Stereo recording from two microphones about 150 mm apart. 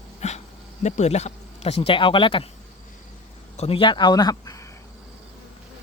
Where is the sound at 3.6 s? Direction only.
35° left (ahead or behind).